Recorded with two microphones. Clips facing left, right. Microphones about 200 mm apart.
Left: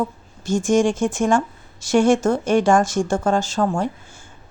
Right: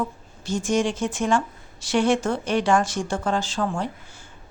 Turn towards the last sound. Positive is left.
turn(degrees=45)  # may be behind; listen again after turning